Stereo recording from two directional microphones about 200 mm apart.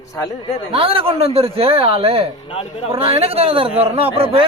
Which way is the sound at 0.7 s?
30° right (ahead or behind).